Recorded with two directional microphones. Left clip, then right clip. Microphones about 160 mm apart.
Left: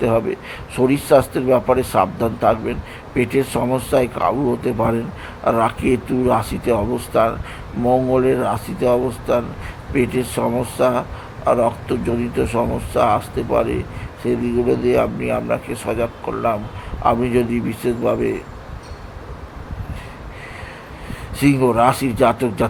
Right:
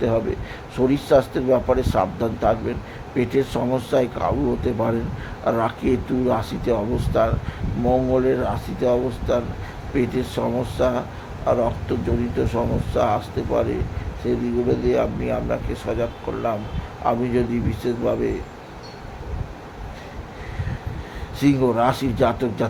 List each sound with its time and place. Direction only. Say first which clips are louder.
0.8 s speech: left 3 dB; 15° left (ahead or behind)
21.3 s speech: left 4 dB; 20° left (ahead or behind)